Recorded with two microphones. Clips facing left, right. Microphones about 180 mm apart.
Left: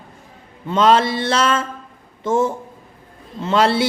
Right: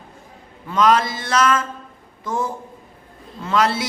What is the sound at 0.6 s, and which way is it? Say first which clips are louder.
A man's voice: left 2 dB; 25° left (ahead or behind).